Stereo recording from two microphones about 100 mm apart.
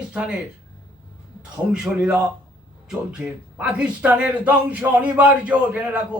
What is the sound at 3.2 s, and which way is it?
A man's voice, 10° right (ahead or behind).